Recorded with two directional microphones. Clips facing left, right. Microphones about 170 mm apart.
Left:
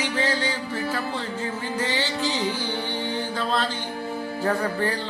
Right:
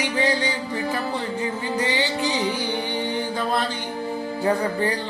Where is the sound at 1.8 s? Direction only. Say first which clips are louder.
Right 2 dB; 15° right (ahead or behind).